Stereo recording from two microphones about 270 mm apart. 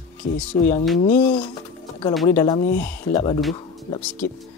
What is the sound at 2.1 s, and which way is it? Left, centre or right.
Speech, centre.